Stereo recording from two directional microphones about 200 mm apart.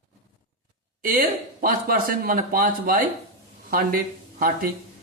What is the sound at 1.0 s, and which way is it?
Speech, 45° right (ahead or behind).